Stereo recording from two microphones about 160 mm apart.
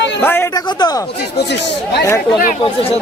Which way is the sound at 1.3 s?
90° left.